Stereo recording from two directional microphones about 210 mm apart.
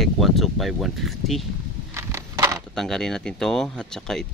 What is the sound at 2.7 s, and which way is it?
Speech, centre (ahead or behind).